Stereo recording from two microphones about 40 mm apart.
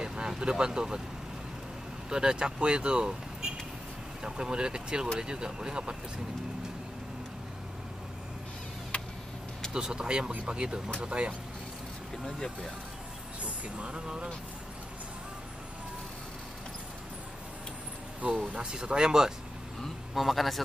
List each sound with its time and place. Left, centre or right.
0.0 s vehicle: right
0.4 s speech: right
2.0 s speech: centre
4.2 s speech: centre
8.9 s tick: left
9.7 s speech: centre
12.3 s speech: centre
13.4 s speech: right
18.5 s speech: right
20.2 s a man's voice: centre